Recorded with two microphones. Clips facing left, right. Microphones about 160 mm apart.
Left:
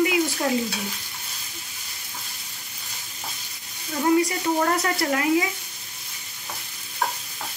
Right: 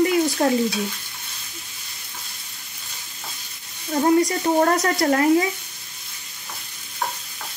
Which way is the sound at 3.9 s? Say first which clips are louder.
Right 3 dB; 40° right (ahead or behind).